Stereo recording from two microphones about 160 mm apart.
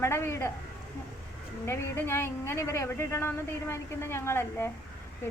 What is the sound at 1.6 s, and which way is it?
A woman's voice, 15° left (ahead or behind).